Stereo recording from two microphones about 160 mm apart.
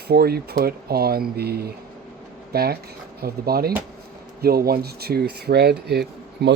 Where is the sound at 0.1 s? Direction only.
80° right.